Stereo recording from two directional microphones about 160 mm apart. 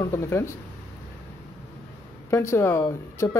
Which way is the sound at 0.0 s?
15° left (ahead or behind).